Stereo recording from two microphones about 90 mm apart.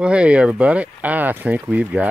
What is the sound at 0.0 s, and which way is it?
Speech, 10° right (ahead or behind).